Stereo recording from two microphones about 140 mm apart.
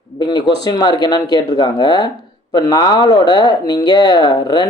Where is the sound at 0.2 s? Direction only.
30° left (ahead or behind).